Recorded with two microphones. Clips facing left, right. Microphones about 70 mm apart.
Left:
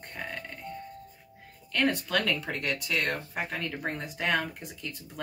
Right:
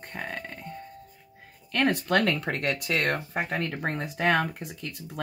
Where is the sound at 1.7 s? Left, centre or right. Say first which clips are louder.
Right 3 dB; right.